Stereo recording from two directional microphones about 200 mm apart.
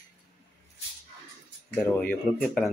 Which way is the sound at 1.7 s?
10° left (ahead or behind).